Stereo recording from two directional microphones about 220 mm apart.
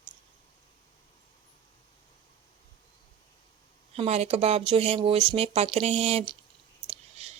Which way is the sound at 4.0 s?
30° right (ahead or behind).